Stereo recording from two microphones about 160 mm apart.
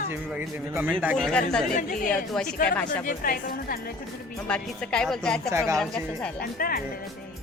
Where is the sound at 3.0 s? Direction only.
60° left (ahead or behind).